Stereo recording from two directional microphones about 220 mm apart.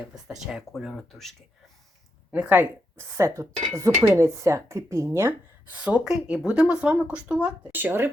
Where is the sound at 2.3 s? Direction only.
5° right (ahead or behind).